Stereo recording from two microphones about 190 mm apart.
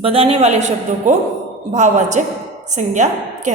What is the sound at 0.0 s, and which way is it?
A man's voice, 30° right (ahead or behind).